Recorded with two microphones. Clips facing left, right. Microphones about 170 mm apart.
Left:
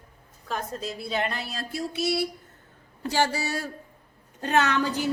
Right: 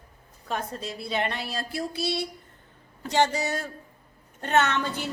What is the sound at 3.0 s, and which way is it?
Speech, 20° right (ahead or behind).